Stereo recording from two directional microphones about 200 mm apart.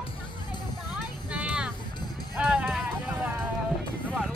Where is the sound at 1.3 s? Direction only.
5° right (ahead or behind).